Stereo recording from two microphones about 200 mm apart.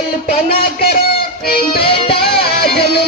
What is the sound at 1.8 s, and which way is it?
Music, 25° left (ahead or behind).